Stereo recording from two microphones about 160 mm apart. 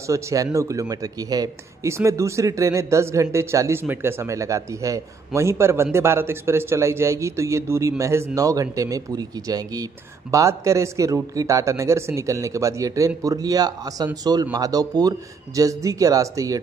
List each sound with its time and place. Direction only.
0.0 s a man's voice: 20° right (ahead or behind)